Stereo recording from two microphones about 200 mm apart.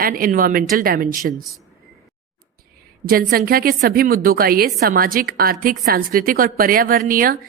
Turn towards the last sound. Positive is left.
turn(degrees=-45)  # may be behind; listen again after turning